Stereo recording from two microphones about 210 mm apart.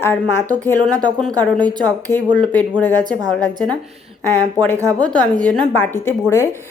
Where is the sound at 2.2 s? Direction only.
20° right (ahead or behind).